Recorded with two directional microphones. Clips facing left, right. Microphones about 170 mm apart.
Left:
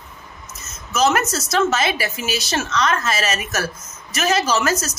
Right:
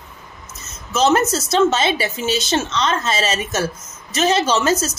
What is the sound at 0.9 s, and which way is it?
A woman's voice, 30° right (ahead or behind).